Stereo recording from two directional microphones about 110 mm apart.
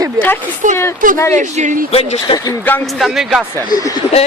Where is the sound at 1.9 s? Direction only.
65° left (ahead or behind).